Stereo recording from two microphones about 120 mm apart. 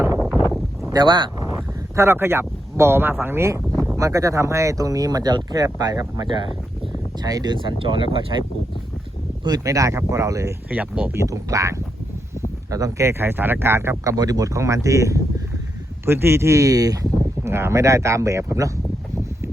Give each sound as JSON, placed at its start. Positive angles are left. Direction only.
{"t": 0.9, "sound": "vehicle", "side_deg": -40}
{"t": 2.0, "sound": "speech", "side_deg": -20}
{"t": 3.7, "sound": "a sound", "side_deg": 5}
{"t": 3.9, "sound": "speech", "side_deg": -25}
{"t": 9.4, "sound": "speech", "side_deg": -30}
{"t": 10.7, "sound": "speech", "side_deg": -10}
{"t": 11.2, "sound": "speech", "side_deg": -25}